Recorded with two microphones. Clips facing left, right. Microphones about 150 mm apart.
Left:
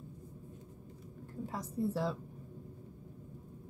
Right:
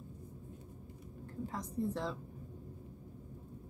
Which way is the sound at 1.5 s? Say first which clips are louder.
Left 2 dB; 5° left (ahead or behind).